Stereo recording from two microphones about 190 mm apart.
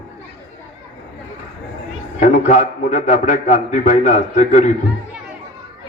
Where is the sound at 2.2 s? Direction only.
40° left (ahead or behind).